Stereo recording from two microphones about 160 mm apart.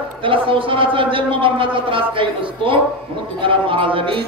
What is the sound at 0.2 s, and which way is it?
A man's voice, 35° right (ahead or behind).